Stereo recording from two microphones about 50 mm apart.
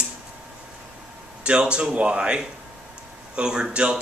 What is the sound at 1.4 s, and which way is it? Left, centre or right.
A man's voice, right.